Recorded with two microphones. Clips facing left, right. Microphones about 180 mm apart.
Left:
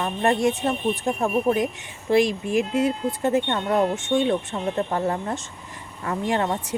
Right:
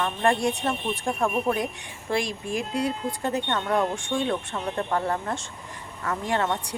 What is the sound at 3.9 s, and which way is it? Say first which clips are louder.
Speech: left 5 dB; 20° left (ahead or behind).